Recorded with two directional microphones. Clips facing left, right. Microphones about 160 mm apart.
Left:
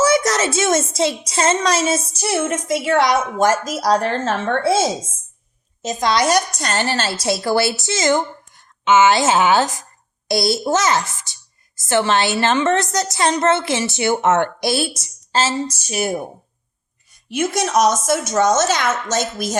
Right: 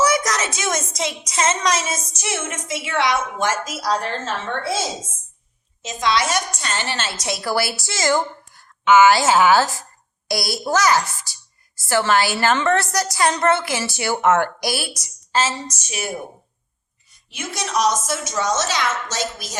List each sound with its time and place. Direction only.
0.0 s a woman's voice: 30° left (ahead or behind)
5.8 s a woman's voice: 40° left (ahead or behind)
17.2 s a woman's voice: 50° left (ahead or behind)